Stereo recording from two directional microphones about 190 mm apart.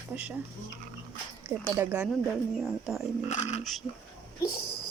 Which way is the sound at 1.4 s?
10° right (ahead or behind).